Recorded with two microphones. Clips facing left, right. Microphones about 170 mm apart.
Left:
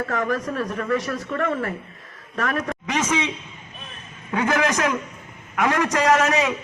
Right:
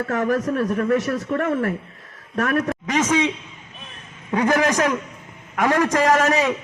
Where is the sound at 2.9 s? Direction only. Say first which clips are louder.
Right 3 dB; 45° right (ahead or behind).